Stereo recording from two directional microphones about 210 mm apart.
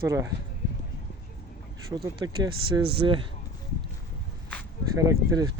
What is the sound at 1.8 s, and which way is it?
Speech, 20° right (ahead or behind).